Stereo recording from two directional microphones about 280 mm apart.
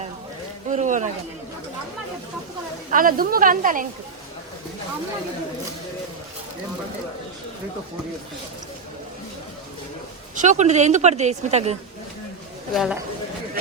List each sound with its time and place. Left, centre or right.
0.7 s a woman's voice: right
2.9 s a woman's voice: right
10.3 s a woman's voice: right
12.7 s speech: centre